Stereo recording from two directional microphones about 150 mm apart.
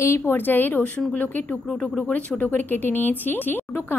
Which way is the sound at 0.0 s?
15° left (ahead or behind).